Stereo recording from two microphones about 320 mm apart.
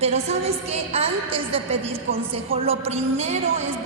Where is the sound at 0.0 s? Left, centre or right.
Centre.